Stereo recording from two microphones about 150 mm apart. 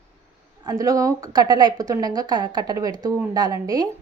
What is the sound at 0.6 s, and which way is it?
A woman's voice, 25° right (ahead or behind).